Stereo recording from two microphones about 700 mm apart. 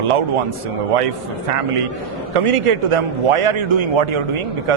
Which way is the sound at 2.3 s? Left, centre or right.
Right.